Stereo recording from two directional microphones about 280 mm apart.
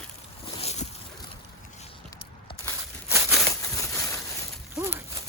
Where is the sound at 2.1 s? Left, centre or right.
Centre.